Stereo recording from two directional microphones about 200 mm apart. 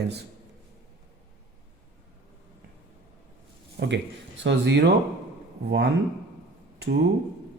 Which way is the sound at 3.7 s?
60° right (ahead or behind).